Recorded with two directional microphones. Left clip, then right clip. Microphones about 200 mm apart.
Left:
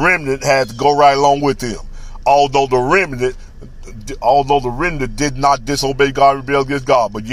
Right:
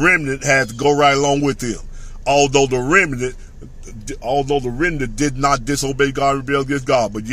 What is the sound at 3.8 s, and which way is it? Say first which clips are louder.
Speech: left 9 dB; 5° left (ahead or behind).